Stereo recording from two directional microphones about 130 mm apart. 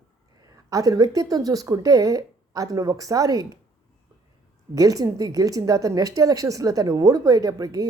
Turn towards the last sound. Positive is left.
turn(degrees=-30)  # may be behind; listen again after turning